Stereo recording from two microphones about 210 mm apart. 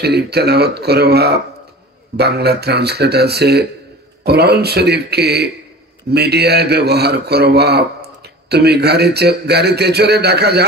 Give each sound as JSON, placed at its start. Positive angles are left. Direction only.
{"t": 0.0, "sound": "a man's voice", "side_deg": -50}